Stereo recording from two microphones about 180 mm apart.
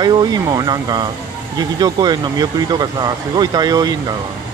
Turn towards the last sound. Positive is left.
turn(degrees=-20)  # may be behind; listen again after turning